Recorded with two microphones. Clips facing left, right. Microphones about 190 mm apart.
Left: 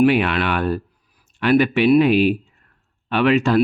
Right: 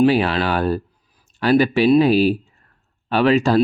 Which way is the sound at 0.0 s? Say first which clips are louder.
Even; 30° right (ahead or behind).